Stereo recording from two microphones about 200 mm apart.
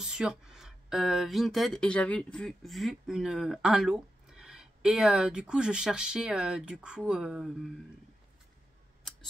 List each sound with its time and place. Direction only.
0.0 s speech: 5° right (ahead or behind)